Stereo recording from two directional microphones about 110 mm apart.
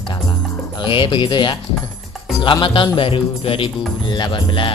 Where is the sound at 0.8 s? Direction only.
50° left (ahead or behind).